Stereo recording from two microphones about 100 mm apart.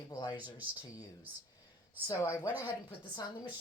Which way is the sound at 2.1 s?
30° left (ahead or behind).